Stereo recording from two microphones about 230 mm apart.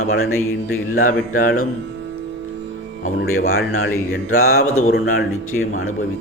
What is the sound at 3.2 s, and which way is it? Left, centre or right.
A man's voice, left.